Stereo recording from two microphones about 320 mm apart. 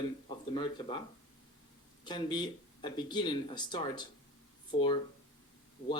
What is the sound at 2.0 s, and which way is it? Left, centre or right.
Speech, centre.